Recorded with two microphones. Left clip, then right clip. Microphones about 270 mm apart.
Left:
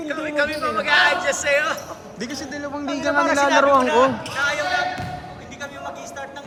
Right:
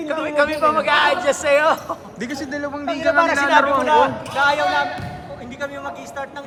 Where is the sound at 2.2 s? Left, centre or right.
Centre.